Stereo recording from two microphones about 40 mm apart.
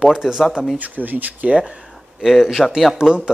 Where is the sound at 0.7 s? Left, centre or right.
Right.